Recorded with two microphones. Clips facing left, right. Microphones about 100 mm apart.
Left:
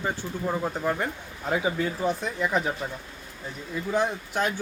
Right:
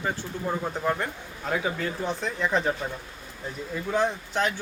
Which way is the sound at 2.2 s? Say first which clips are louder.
Even; 10° left (ahead or behind).